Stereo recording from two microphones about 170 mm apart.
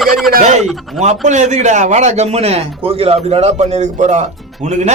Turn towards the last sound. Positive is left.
turn(degrees=-45)  # may be behind; listen again after turning